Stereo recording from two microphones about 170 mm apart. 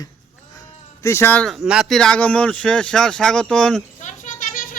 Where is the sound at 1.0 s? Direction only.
15° left (ahead or behind).